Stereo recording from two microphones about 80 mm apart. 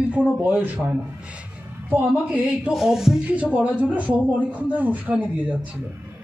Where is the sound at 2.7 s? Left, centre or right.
Centre.